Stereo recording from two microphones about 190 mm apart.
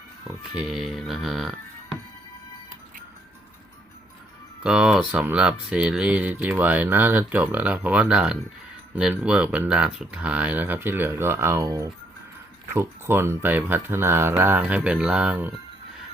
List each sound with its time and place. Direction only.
0.3 s speech: 5° right (ahead or behind)
4.6 s speech: 5° right (ahead or behind)